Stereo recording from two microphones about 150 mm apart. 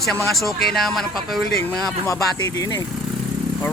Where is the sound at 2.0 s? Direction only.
20° left (ahead or behind).